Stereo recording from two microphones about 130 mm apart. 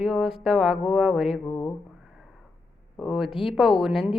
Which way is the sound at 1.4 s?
20° left (ahead or behind).